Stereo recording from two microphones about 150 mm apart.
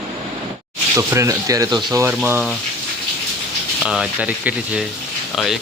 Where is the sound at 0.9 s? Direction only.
15° right (ahead or behind).